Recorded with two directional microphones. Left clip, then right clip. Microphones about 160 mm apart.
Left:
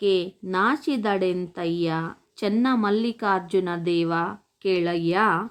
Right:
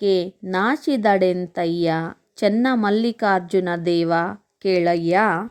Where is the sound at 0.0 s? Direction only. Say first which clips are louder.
Right 3 dB; 35° right (ahead or behind).